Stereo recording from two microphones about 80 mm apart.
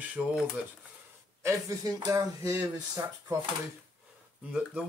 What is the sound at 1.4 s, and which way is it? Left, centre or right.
Speech, right.